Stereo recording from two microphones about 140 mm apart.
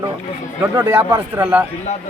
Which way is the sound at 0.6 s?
15° right (ahead or behind).